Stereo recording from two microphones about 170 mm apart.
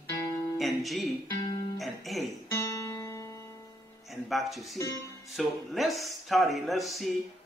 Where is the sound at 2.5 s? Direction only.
20° left (ahead or behind).